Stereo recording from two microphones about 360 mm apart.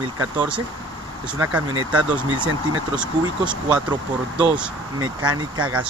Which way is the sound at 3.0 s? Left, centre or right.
Centre.